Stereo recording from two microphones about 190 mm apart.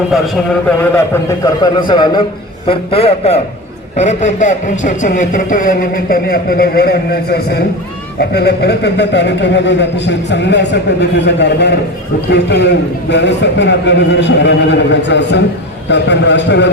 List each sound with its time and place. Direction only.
0.1 s a man's voice: centre (ahead or behind)
0.8 s a man's voice: 10° left (ahead or behind)
1.6 s a man's voice: 25° left (ahead or behind); by 16.6 s 65° left (ahead or behind)